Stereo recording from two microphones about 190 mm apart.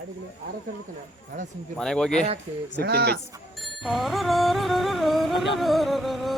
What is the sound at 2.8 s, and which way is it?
Speech, 60° right (ahead or behind).